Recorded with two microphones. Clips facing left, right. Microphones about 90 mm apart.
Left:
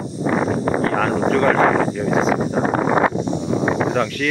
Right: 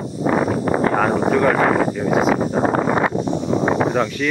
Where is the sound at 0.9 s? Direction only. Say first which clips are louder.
Right 1 dB; 10° right (ahead or behind).